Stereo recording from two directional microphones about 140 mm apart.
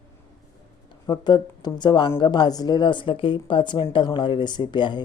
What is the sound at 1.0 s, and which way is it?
Speech, 25° left (ahead or behind).